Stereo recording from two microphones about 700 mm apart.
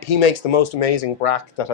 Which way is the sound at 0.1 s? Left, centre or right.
Left.